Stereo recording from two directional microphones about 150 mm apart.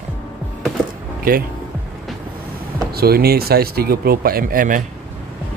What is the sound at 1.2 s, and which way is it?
Speech, 75° right (ahead or behind).